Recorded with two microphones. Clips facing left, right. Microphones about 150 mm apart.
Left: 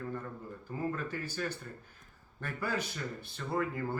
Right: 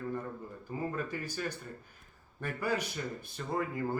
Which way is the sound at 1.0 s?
15° right (ahead or behind).